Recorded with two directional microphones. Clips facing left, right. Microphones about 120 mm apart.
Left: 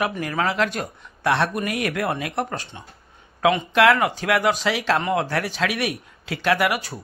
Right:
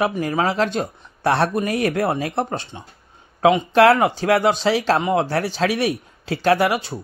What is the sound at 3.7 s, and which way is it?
Speech, 35° right (ahead or behind).